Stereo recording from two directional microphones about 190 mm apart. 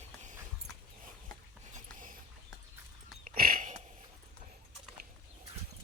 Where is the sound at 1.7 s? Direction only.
45° right (ahead or behind).